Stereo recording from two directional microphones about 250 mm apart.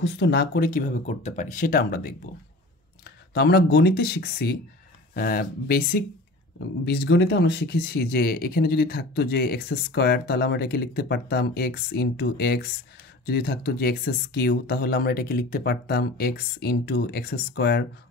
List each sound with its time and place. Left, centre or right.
0.0 s speech: left
3.3 s speech: left